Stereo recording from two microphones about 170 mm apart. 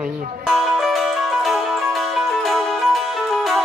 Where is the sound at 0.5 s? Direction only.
Centre (ahead or behind).